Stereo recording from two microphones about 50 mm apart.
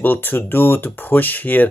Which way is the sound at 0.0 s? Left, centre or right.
Left.